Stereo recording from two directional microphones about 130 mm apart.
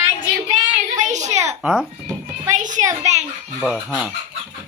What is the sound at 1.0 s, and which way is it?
Speech, 65° right (ahead or behind).